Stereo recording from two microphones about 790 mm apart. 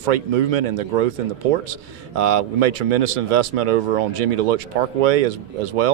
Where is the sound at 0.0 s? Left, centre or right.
Right.